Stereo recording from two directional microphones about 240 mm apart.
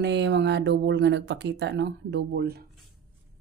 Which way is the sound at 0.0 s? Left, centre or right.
Right.